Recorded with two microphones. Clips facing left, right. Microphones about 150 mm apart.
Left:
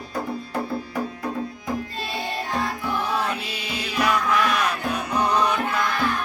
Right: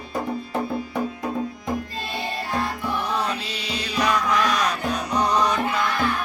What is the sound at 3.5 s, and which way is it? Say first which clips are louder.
Music: right 1 dB; 5° left (ahead or behind).